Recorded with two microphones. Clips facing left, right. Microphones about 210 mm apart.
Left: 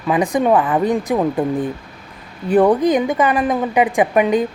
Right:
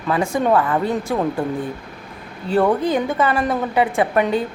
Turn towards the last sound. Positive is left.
turn(degrees=15)  # may be behind; listen again after turning